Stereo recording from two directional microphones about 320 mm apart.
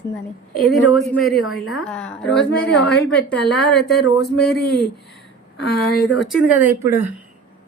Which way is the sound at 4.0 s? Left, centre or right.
Left.